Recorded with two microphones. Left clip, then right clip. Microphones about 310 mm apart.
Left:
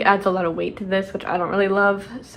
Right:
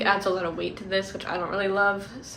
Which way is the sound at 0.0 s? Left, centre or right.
Centre.